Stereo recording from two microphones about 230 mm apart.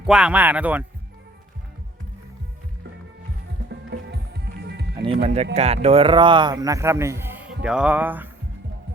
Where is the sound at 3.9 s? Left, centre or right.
Right.